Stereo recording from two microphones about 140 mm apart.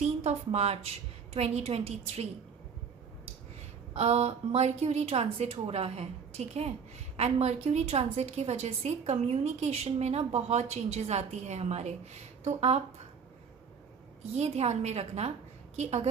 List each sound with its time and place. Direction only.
0.0 s a woman's voice: 50° right (ahead or behind)
3.9 s a woman's voice: 50° right (ahead or behind)
14.3 s a woman's voice: 50° right (ahead or behind)